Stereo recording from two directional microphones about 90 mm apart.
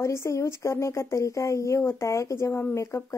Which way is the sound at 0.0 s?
30° left (ahead or behind).